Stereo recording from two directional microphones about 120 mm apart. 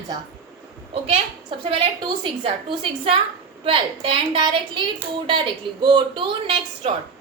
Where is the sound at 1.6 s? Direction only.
45° right (ahead or behind).